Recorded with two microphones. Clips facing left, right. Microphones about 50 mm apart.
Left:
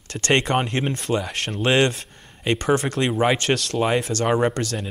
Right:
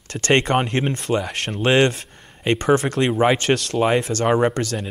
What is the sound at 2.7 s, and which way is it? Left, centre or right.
Speech, right.